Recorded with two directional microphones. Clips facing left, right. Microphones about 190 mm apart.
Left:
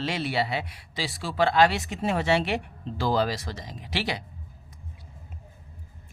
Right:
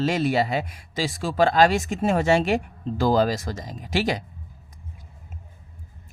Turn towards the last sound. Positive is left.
turn(degrees=-45)  # may be behind; listen again after turning